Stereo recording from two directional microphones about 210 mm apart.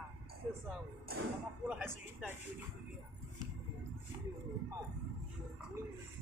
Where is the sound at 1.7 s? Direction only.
10° right (ahead or behind).